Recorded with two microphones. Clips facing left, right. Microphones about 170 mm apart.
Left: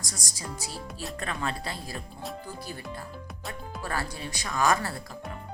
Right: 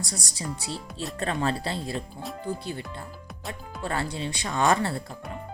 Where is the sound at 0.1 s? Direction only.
30° right (ahead or behind).